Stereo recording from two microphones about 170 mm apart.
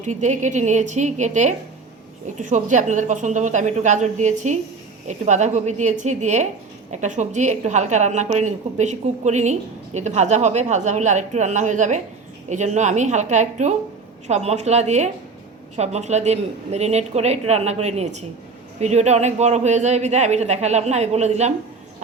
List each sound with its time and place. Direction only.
0.0 s a woman's voice: 45° right (ahead or behind)